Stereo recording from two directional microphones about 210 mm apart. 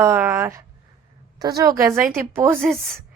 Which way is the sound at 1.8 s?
5° right (ahead or behind).